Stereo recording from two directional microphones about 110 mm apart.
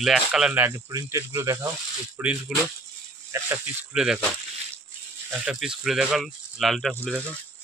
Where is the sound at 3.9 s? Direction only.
5° right (ahead or behind).